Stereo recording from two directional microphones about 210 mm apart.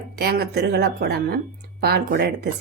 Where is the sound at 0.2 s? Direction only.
45° right (ahead or behind).